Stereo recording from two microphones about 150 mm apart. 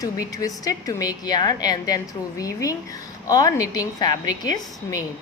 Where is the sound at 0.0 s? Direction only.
25° left (ahead or behind).